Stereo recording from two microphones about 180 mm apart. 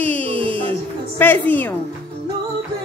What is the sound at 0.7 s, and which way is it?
Speech, 10° left (ahead or behind).